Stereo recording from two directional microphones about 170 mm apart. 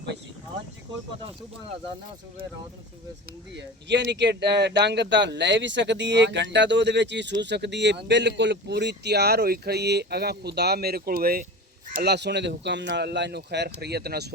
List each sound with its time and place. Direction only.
3.5 s speech: 90° right; by 11.4 s 60° right (ahead or behind)
11.9 s speech: 80° right